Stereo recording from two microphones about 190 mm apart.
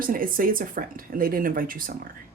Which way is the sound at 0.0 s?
50° right (ahead or behind).